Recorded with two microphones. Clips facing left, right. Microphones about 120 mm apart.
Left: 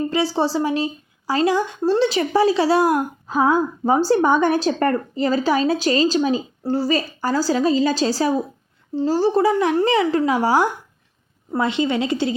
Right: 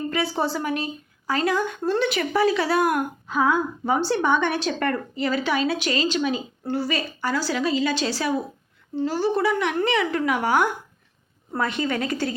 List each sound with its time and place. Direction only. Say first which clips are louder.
0.1 s speech: left 5 dB; 30° left (ahead or behind)
11.8 s speech: left 5 dB; 20° left (ahead or behind)